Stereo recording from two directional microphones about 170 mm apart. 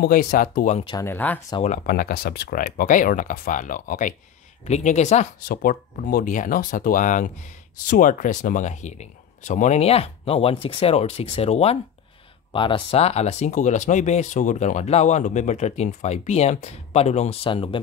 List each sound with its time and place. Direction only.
0.0 s speech: 55° left (ahead or behind)
1.0 s speech: 10° left (ahead or behind)
1.9 s speech: 60° left (ahead or behind)
4.6 s speech: 40° left (ahead or behind)
5.4 s speech: 60° left (ahead or behind); by 17.7 s 30° left (ahead or behind)